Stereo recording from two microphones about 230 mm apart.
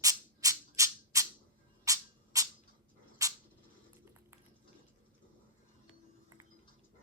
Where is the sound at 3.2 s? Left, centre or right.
Centre.